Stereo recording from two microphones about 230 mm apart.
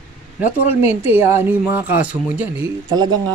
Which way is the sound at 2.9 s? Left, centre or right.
Centre.